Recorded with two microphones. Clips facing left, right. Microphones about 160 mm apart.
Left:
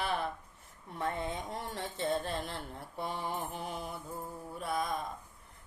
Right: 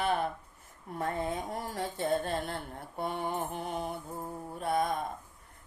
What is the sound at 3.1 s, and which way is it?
Mantra, 55° right (ahead or behind).